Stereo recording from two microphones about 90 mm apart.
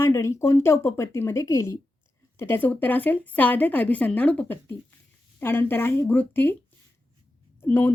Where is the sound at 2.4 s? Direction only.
25° left (ahead or behind).